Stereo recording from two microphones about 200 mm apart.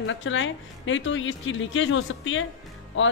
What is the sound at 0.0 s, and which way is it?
Speech, 75° left (ahead or behind).